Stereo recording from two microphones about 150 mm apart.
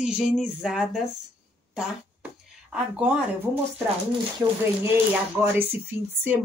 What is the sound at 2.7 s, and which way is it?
Speech, 10° right (ahead or behind).